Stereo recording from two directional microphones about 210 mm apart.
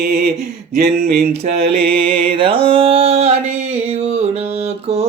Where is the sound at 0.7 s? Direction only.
50° right (ahead or behind).